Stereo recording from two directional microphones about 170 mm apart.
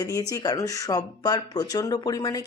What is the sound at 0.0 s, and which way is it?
Speech, 20° left (ahead or behind).